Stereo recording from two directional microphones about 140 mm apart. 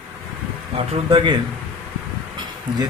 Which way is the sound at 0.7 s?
40° right (ahead or behind).